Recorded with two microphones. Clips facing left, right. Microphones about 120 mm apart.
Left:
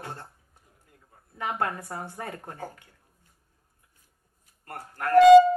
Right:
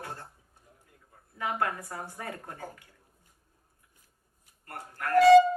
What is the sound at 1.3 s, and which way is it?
A man's voice, 25° left (ahead or behind).